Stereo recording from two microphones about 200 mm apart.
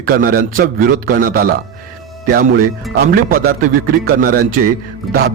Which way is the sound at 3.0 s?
45° right (ahead or behind).